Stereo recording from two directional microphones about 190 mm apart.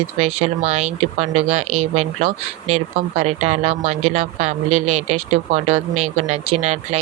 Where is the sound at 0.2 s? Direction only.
35° right (ahead or behind).